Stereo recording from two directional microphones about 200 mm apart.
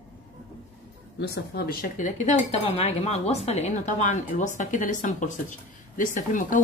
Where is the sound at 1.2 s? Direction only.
55° left (ahead or behind).